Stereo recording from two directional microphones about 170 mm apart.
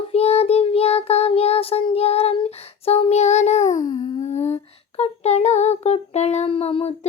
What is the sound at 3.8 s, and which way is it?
Child singing, 25° left (ahead or behind).